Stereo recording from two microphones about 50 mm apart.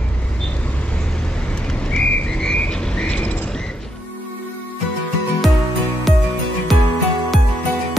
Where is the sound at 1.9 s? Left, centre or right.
Centre.